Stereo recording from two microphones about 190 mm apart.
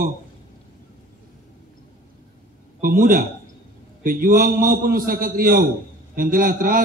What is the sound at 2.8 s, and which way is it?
A man's voice, 45° right (ahead or behind).